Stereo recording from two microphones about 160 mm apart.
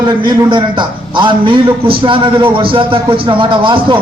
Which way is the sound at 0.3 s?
30° right (ahead or behind).